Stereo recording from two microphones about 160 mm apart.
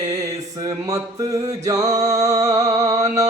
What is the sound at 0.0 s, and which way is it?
Music, 20° right (ahead or behind).